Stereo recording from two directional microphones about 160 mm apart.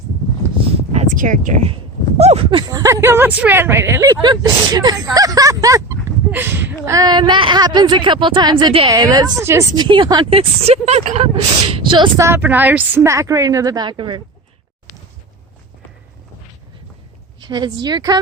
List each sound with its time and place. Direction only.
0.9 s a sound: 55° right (ahead or behind)
2.1 s speech: 40° right (ahead or behind)
2.8 s speech: 15° right (ahead or behind)
5.1 s a sound: 25° right (ahead or behind)
6.8 s a woman's voice: 20° right (ahead or behind)
8.9 s a woman's voice: 25° right (ahead or behind); by 11.3 s 40° right (ahead or behind)
11.7 s a woman's voice: 30° right (ahead or behind)
12.2 s a woman's voice: 15° right (ahead or behind); by 14.2 s 30° right (ahead or behind)
17.4 s a woman's voice: 25° right (ahead or behind)